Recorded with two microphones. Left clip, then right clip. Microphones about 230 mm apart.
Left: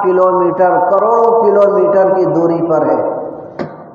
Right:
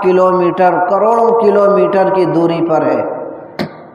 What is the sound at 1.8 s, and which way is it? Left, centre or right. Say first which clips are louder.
Speech: left 1 dB; right.